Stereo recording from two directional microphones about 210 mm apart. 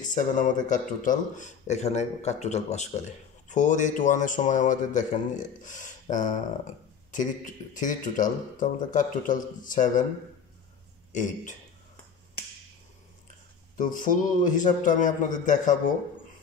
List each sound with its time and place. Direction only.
0.0 s speech: 40° left (ahead or behind)
13.7 s speech: 40° left (ahead or behind)